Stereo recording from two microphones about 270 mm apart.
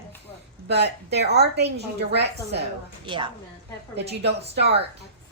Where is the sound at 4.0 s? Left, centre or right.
Right.